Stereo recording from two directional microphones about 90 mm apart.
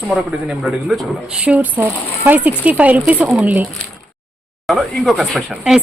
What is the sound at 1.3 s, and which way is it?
Speech, 15° right (ahead or behind).